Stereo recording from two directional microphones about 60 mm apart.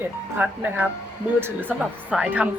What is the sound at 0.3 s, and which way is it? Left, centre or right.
Speech, right.